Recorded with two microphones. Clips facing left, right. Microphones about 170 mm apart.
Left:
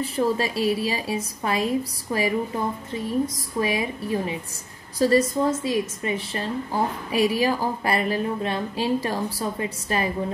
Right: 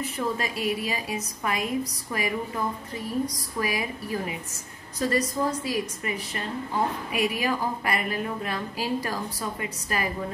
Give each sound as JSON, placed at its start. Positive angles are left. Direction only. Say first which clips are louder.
{"t": 0.0, "sound": "a woman's voice", "louder": "left 6 dB", "side_deg": 30}